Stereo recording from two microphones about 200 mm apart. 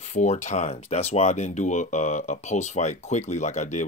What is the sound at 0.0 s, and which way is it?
Speech, 35° left (ahead or behind).